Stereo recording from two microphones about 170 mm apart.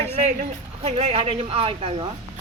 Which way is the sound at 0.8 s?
35° right (ahead or behind).